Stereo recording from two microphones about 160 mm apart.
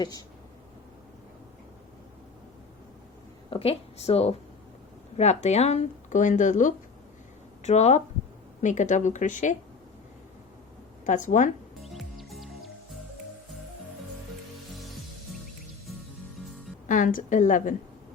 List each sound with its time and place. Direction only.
0.0 s speech: 25° left (ahead or behind)
3.5 s speech: 40° left (ahead or behind)
11.0 s speech: 50° left (ahead or behind)
11.8 s music: centre (ahead or behind)
16.9 s a woman's voice: 55° left (ahead or behind)